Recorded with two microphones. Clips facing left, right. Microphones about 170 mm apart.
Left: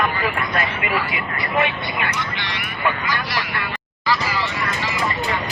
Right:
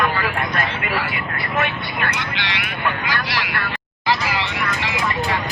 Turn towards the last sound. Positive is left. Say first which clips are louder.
# right 1 dB
turn(degrees=-65)  # may be behind; listen again after turning